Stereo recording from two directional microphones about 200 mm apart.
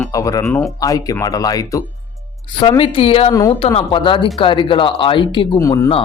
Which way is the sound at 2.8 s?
30° left (ahead or behind).